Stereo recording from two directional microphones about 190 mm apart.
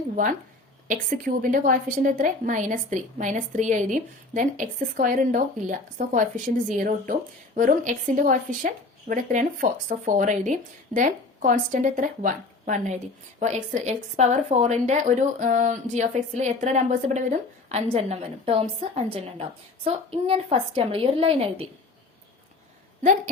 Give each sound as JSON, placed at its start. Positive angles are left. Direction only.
{"t": 0.9, "sound": "speech", "side_deg": -45}